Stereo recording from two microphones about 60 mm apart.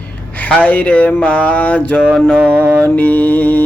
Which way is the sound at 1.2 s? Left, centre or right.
Centre.